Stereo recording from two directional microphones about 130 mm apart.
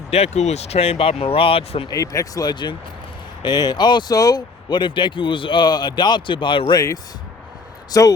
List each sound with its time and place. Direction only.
0.1 s speech: 55° left (ahead or behind)
1.9 s speech: 25° left (ahead or behind)